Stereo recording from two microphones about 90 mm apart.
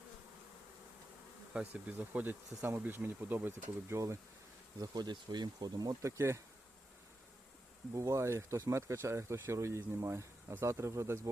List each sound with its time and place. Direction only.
1.5 s speech: 20° right (ahead or behind)
4.8 s speech: 50° right (ahead or behind)
6.0 s speech: 30° right (ahead or behind)
7.9 s speech: 35° right (ahead or behind)